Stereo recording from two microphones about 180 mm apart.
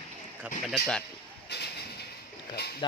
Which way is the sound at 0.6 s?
5° left (ahead or behind).